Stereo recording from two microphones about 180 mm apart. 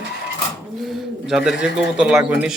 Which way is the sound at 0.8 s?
Centre (ahead or behind).